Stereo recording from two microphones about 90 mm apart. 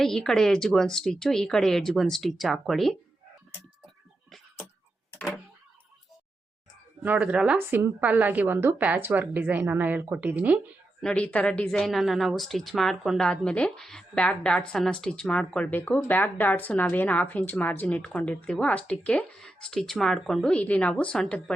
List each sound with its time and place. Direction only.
0.0 s a woman's voice: 5° left (ahead or behind)
7.0 s speech: 15° right (ahead or behind)
7.7 s a woman's voice: 25° right (ahead or behind)
11.0 s a woman's voice: 10° left (ahead or behind)